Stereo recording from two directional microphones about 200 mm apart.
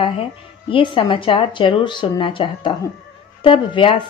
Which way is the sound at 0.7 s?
25° left (ahead or behind).